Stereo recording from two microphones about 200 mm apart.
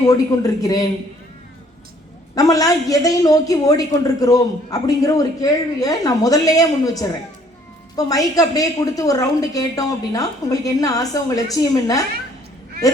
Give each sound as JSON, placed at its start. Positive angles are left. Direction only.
{"t": 0.0, "sound": "a woman's voice", "side_deg": 15}
{"t": 2.3, "sound": "a woman's voice", "side_deg": 15}